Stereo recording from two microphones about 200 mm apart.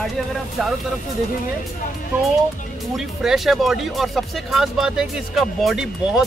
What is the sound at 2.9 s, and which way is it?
Speech, centre (ahead or behind).